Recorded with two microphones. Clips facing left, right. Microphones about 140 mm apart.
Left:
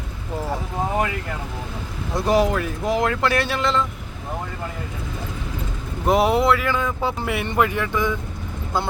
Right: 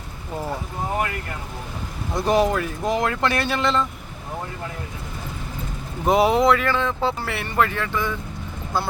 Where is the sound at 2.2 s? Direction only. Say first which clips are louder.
Even; centre (ahead or behind).